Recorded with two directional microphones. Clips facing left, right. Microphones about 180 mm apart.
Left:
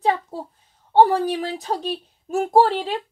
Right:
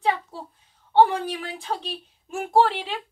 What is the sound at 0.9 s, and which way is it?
Speech, 40° left (ahead or behind).